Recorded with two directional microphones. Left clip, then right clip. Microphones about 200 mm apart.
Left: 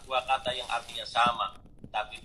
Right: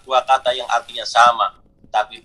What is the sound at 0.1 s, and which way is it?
A man's voice, 50° right (ahead or behind).